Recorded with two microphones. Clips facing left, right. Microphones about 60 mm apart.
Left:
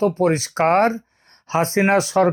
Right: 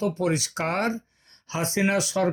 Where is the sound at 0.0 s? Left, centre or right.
Left.